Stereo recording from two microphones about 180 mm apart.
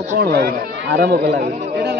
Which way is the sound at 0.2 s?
60° right (ahead or behind).